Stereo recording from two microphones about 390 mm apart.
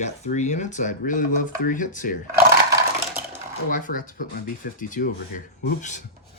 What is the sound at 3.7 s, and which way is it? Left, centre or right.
Dishes, centre.